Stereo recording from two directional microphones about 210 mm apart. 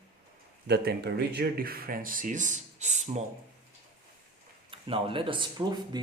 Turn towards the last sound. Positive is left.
turn(degrees=-20)  # may be behind; listen again after turning